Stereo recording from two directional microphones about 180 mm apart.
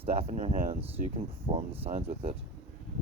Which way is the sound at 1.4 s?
35° right (ahead or behind).